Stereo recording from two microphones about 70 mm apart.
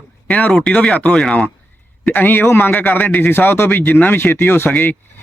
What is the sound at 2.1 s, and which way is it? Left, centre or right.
A man's voice, left.